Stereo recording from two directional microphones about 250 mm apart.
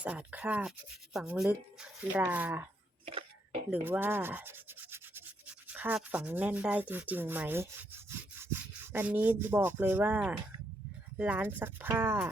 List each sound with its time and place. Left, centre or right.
0.0 s speech: centre
3.7 s rub: centre
11.2 s speech: centre